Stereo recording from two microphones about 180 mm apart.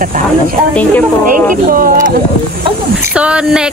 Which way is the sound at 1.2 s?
50° right (ahead or behind).